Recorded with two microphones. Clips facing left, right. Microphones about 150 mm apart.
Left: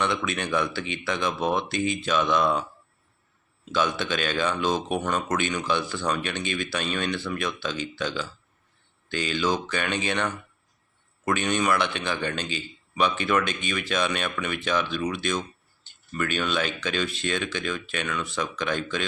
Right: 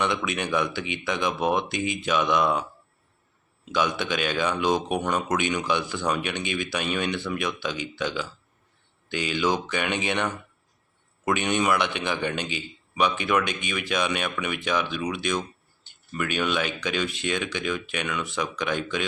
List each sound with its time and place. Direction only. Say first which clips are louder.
0.0 s a man's voice: right 1 dB; 15° right (ahead or behind)
3.7 s a man's voice: even; 15° right (ahead or behind)